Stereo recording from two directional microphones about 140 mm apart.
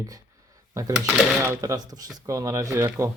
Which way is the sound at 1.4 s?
20° right (ahead or behind).